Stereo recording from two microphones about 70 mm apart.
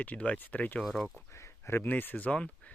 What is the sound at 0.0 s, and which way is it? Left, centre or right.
Speech, centre.